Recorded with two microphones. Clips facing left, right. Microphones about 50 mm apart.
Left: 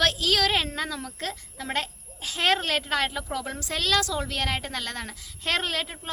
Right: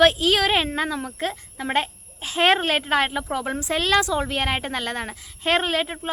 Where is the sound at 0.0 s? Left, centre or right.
Right.